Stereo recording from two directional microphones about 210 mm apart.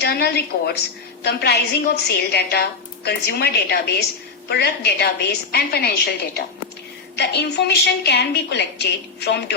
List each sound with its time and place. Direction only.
0.0 s a woman's voice: 50° left (ahead or behind)
7.2 s a woman's voice: 50° left (ahead or behind)